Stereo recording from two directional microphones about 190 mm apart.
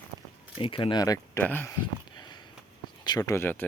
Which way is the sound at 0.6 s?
25° left (ahead or behind).